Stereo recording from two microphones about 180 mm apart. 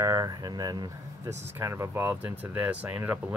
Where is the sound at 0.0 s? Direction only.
20° right (ahead or behind).